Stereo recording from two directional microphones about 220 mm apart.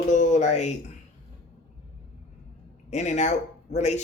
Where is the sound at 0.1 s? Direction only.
35° left (ahead or behind).